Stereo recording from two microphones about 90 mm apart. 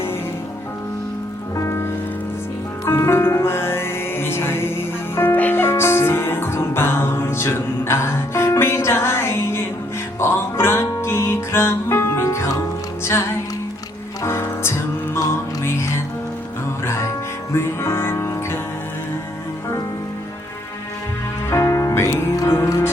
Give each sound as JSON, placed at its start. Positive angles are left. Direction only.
{"t": 1.5, "sound": "music", "side_deg": 30}
{"t": 2.9, "sound": "music", "side_deg": 30}
{"t": 14.3, "sound": "music", "side_deg": 30}
{"t": 17.6, "sound": "music", "side_deg": 30}
{"t": 21.5, "sound": "music", "side_deg": 35}